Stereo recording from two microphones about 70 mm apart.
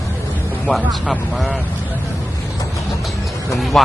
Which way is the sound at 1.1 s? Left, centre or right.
Centre.